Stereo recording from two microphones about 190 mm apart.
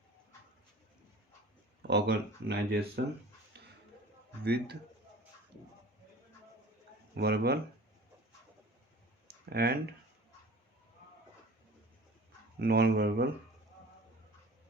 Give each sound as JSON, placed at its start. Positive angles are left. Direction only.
{"t": 1.8, "sound": "speech", "side_deg": -60}
{"t": 3.6, "sound": "a sound", "side_deg": -60}
{"t": 4.4, "sound": "speech", "side_deg": -60}
{"t": 7.2, "sound": "speech", "side_deg": -55}
{"t": 9.2, "sound": "clicking", "side_deg": -55}
{"t": 12.5, "sound": "speech", "side_deg": -55}